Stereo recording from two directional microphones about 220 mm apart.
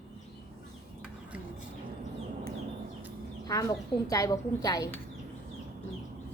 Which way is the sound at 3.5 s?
15° left (ahead or behind).